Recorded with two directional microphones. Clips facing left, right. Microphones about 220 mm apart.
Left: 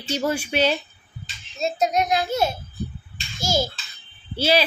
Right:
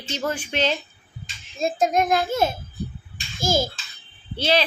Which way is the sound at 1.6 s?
50° right (ahead or behind).